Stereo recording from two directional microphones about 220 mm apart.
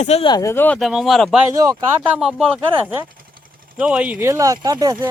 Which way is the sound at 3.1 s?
40° right (ahead or behind).